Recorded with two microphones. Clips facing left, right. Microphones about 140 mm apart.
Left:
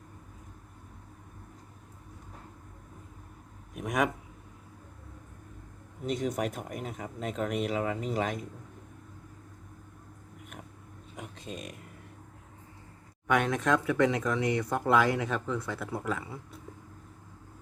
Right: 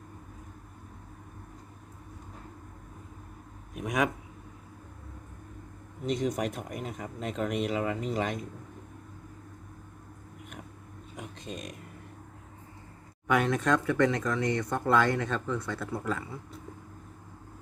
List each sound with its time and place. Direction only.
3.8 s speech: centre (ahead or behind)
6.1 s speech: 5° left (ahead or behind)
11.2 s a sound: 5° left (ahead or behind)
13.2 s speech: centre (ahead or behind)